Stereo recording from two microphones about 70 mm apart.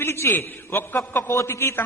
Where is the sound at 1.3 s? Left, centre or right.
Left.